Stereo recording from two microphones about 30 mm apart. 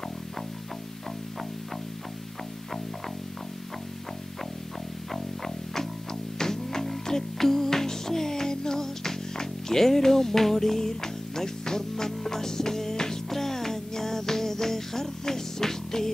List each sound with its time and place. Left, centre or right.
6.3 s music: centre